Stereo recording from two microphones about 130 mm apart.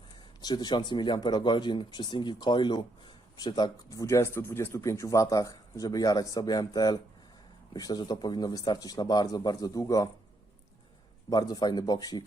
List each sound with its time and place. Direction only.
0.4 s speech: 35° left (ahead or behind)
11.3 s speech: 30° left (ahead or behind)